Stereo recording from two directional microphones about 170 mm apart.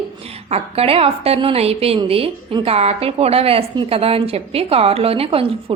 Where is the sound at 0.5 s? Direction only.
35° right (ahead or behind).